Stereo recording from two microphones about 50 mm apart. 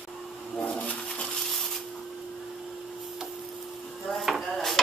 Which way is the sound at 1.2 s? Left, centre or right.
Centre.